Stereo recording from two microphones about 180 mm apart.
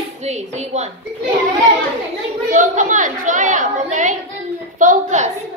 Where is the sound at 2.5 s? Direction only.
45° right (ahead or behind).